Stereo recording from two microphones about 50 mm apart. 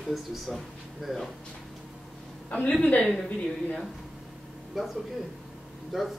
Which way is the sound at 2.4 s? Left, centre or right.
Left.